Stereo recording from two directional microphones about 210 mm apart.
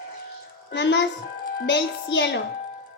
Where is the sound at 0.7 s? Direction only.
55° left (ahead or behind).